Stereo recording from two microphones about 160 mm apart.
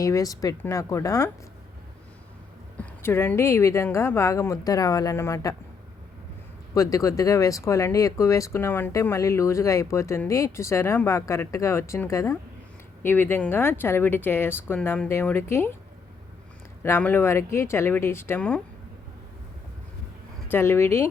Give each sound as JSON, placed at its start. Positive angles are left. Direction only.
{"t": 0.0, "sound": "speech", "side_deg": 20}
{"t": 2.7, "sound": "speech", "side_deg": 15}
{"t": 6.7, "sound": "speech", "side_deg": 20}
{"t": 16.8, "sound": "speech", "side_deg": 15}
{"t": 20.5, "sound": "speech", "side_deg": 15}